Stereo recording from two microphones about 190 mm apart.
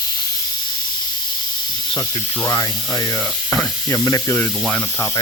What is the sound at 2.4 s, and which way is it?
Speech, 20° left (ahead or behind).